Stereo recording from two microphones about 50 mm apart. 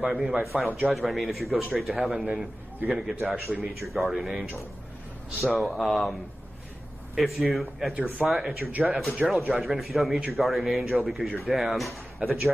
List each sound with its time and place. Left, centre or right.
0.0 s a man's voice: centre
2.1 s a man's voice: centre
3.2 s a man's voice: centre
7.2 s a man's voice: centre
7.9 s speech: right
8.3 s a man's voice: centre
12.2 s a man's voice: right